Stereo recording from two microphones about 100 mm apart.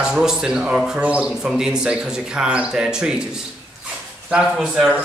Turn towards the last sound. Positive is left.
turn(degrees=-5)  # may be behind; listen again after turning